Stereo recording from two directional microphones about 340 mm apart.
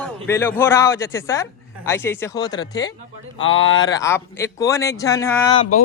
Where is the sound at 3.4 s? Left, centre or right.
Left.